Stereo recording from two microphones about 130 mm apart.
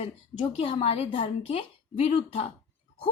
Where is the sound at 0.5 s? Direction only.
50° left (ahead or behind).